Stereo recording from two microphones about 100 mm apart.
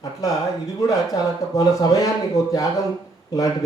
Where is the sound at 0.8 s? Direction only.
35° left (ahead or behind).